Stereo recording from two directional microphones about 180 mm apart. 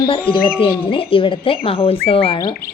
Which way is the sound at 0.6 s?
30° left (ahead or behind).